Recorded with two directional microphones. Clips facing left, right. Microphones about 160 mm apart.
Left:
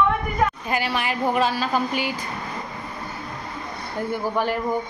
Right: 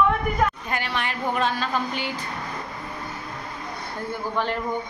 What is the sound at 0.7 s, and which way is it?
Speech, 10° left (ahead or behind).